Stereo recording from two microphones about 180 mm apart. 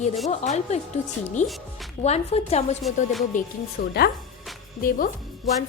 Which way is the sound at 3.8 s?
60° left (ahead or behind).